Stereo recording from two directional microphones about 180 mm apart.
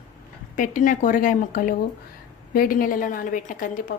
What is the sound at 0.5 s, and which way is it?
A woman's voice, 45° left (ahead or behind).